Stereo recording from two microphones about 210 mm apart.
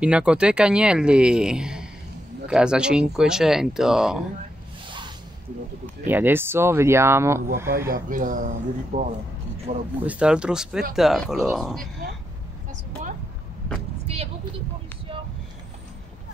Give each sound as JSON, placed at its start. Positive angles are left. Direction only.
{"t": 0.0, "sound": "speech", "side_deg": -5}
{"t": 4.8, "sound": "a sound", "side_deg": -20}
{"t": 6.0, "sound": "speech", "side_deg": -10}
{"t": 7.9, "sound": "speech", "side_deg": -40}
{"t": 10.0, "sound": "speech", "side_deg": -5}
{"t": 14.0, "sound": "vehicle", "side_deg": -30}